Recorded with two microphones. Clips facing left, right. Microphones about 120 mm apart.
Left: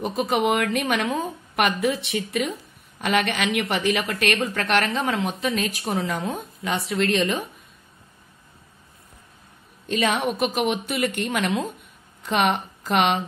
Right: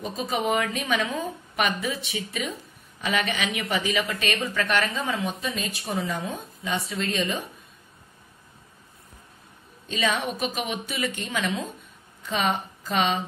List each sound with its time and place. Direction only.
0.0 s a woman's voice: 60° left (ahead or behind)
9.8 s a woman's voice: 55° left (ahead or behind)